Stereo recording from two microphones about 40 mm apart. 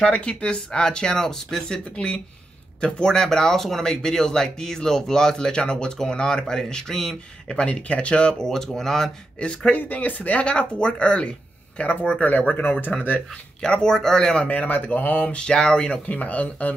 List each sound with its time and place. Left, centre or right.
0.3 s speech: centre
2.0 s speech: left; by 7.2 s centre
7.4 s speech: left
8.6 s speech: centre
9.4 s speech: left
9.8 s speech: left
10.4 s speech: left
12.2 s speech: left
13.6 s speech: centre
14.4 s speech: left
15.2 s speech: left
16.1 s speech: left